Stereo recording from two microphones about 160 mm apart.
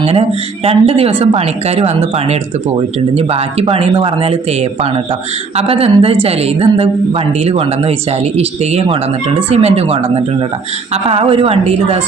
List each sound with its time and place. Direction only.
0.0 s speech: 40° right (ahead or behind)
5.5 s speech: 35° right (ahead or behind)